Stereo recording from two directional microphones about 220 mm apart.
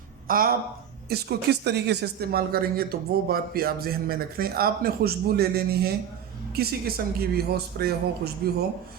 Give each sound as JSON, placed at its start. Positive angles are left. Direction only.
{"t": 0.3, "sound": "a man's voice", "side_deg": -40}